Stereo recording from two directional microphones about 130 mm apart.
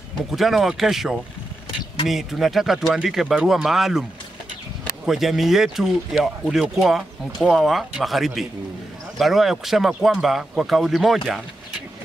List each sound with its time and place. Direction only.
0.3 s speech: centre (ahead or behind)
5.0 s speech: 5° right (ahead or behind)